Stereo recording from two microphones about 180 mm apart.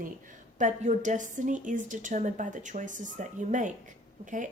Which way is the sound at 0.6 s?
45° right (ahead or behind).